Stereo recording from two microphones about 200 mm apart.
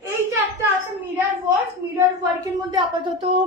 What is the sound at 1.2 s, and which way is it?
A woman's voice, 10° right (ahead or behind).